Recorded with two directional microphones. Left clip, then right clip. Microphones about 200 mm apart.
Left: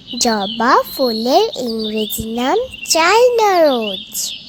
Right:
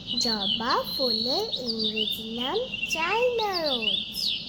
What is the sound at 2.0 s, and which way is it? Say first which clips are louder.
Speech: left 8 dB; 35° left (ahead or behind).